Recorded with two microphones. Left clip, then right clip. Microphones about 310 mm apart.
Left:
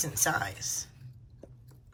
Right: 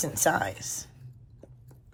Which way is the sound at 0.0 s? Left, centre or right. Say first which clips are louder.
Right 4 dB; centre.